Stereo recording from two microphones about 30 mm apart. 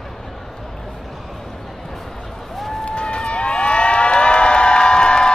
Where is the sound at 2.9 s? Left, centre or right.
Left.